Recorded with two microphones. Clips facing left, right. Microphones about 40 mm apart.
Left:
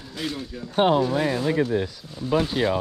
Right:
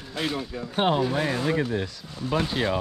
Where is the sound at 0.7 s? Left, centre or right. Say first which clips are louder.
Left 4 dB; centre.